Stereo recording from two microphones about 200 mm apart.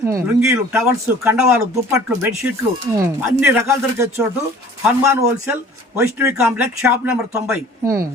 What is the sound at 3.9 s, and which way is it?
Speech, 15° right (ahead or behind).